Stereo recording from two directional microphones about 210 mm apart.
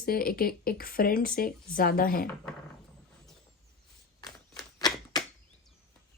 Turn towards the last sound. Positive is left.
turn(degrees=20)  # may be behind; listen again after turning